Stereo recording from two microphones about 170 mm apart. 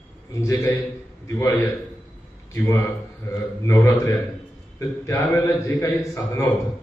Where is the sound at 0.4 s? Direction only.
20° left (ahead or behind).